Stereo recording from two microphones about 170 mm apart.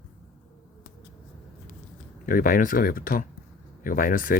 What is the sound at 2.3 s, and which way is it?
Speech, 55° left (ahead or behind).